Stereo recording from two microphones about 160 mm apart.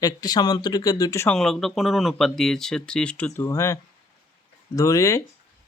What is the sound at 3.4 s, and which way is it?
Speech, 15° left (ahead or behind).